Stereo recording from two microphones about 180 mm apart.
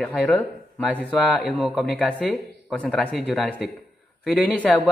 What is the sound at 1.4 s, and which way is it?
A man's voice, 5° right (ahead or behind).